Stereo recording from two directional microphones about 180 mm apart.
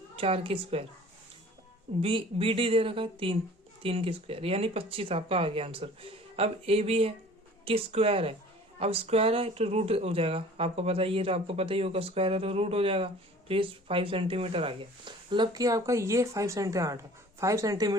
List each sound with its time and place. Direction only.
0.2 s speech: 35° right (ahead or behind)
2.0 s speech: 30° right (ahead or behind)